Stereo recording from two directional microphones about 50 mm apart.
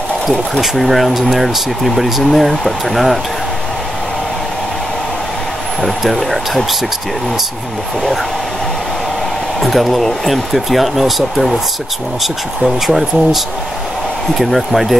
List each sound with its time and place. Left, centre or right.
0.6 s speech: centre
5.8 s speech: centre
9.6 s speech: centre